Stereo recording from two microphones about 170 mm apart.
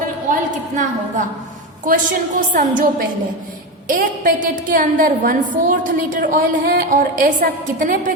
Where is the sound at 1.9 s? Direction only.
50° right (ahead or behind).